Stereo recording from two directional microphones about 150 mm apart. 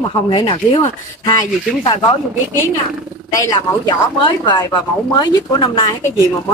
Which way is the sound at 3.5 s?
30° left (ahead or behind).